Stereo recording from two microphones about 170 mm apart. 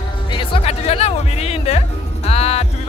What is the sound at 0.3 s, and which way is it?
Music, 30° left (ahead or behind).